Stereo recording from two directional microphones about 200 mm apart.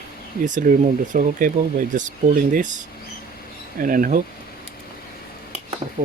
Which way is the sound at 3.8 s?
45° right (ahead or behind).